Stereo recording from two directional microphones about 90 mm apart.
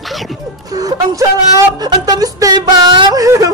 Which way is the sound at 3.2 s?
40° right (ahead or behind).